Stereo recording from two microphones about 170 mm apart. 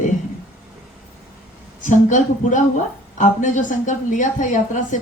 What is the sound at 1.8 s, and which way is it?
A woman's voice, 50° left (ahead or behind).